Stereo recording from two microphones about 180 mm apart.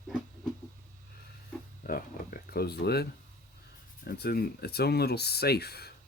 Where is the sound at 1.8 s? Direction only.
55° left (ahead or behind).